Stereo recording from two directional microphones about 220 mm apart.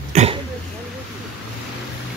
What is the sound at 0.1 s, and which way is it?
Throat clearing, 30° right (ahead or behind).